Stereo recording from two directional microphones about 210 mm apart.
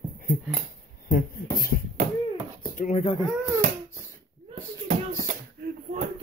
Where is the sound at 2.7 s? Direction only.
35° left (ahead or behind).